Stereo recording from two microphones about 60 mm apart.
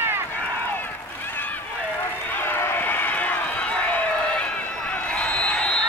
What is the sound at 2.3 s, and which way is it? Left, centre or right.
Run, left.